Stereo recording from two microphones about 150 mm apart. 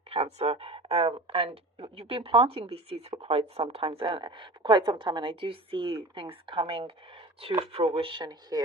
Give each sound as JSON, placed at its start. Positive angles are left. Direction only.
{"t": 0.3, "sound": "speech", "side_deg": -40}